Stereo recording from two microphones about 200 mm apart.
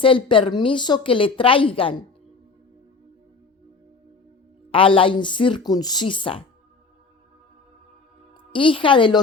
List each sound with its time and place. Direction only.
0.0 s a woman's voice: 25° left (ahead or behind)
4.7 s a woman's voice: 25° left (ahead or behind)
8.5 s a woman's voice: 25° left (ahead or behind)